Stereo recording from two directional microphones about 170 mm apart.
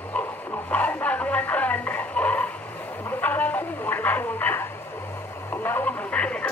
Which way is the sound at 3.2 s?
10° left (ahead or behind).